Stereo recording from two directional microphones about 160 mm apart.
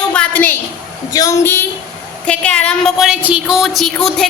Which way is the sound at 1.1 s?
20° left (ahead or behind).